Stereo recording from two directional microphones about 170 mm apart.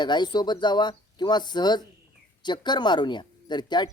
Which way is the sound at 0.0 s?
25° left (ahead or behind).